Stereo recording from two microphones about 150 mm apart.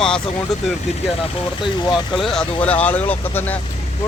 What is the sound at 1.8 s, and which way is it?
Speech, 30° left (ahead or behind).